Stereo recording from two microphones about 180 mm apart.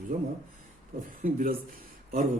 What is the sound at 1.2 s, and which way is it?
Speech, 50° right (ahead or behind).